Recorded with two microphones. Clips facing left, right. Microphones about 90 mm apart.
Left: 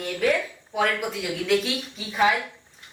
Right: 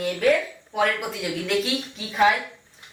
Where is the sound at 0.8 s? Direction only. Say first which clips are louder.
Right 1 dB; centre (ahead or behind).